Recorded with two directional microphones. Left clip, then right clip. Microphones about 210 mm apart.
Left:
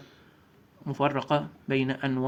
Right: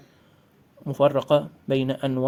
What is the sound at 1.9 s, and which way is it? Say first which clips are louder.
Speech: right 4 dB; 55° right (ahead or behind).